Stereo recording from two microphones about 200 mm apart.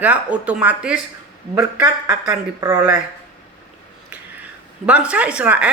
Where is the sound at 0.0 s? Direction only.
5° right (ahead or behind).